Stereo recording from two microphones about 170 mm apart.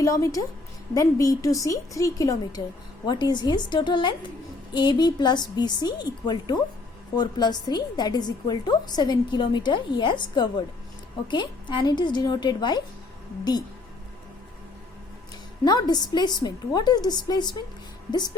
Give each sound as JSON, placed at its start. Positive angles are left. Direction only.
{"t": 0.0, "sound": "a woman's voice", "side_deg": 20}
{"t": 15.6, "sound": "a woman's voice", "side_deg": 25}